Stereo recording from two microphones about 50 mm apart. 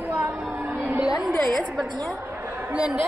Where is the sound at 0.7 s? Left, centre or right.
Right.